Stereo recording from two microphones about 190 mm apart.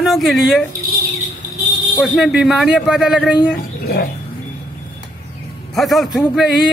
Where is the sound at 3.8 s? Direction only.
55° left (ahead or behind).